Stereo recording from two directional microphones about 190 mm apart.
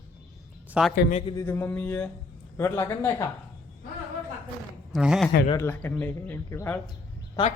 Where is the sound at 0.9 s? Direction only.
50° left (ahead or behind).